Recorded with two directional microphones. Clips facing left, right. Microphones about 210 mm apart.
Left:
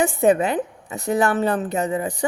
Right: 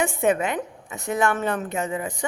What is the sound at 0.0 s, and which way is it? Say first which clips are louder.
Speech: left 4 dB; 35° left (ahead or behind).